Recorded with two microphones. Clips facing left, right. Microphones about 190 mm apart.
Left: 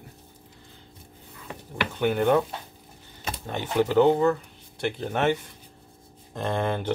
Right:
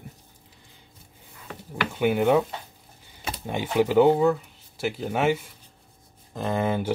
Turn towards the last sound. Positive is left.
turn(degrees=-5)  # may be behind; listen again after turning